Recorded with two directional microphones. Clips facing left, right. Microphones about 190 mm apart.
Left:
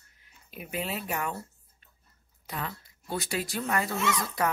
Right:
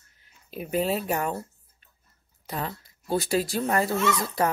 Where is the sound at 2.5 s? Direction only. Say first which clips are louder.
Right 4 dB; 35° right (ahead or behind).